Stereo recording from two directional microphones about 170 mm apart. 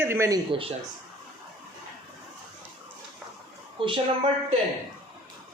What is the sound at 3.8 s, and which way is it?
Speech, 30° right (ahead or behind).